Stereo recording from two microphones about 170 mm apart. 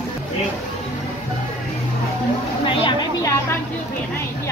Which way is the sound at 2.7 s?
30° left (ahead or behind).